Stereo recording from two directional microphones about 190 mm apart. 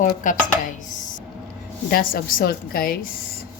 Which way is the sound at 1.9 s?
50° left (ahead or behind).